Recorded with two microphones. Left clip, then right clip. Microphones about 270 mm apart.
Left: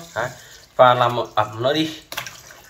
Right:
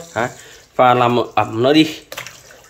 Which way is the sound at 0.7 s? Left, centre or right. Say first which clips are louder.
Right 2 dB; right.